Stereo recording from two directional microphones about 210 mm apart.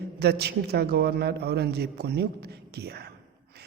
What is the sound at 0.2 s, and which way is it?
Speech, 50° right (ahead or behind).